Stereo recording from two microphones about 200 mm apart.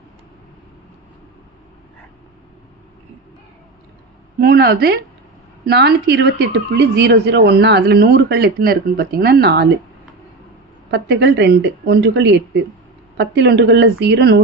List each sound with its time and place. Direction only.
4.4 s a woman's voice: 50° right (ahead or behind)
10.9 s speech: 60° right (ahead or behind)